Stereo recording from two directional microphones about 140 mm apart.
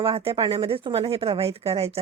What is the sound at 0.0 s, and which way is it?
A woman's voice, 40° right (ahead or behind).